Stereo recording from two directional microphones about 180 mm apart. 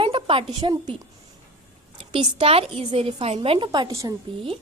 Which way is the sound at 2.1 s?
30° right (ahead or behind).